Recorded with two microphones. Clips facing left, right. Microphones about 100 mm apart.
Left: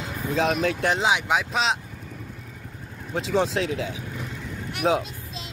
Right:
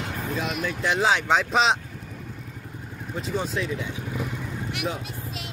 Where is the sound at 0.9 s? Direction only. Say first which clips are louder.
Right 1 dB; 15° left (ahead or behind).